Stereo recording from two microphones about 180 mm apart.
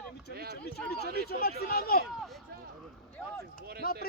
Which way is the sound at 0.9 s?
60° left (ahead or behind).